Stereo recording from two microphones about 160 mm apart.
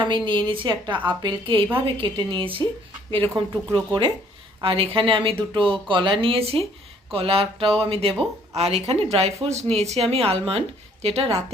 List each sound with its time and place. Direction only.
0.3 s a woman's voice: 30° right (ahead or behind)